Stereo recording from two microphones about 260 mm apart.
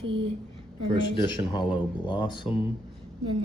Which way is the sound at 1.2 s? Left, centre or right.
Centre.